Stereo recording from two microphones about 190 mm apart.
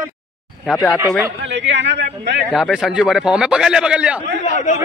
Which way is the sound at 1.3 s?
65° right (ahead or behind).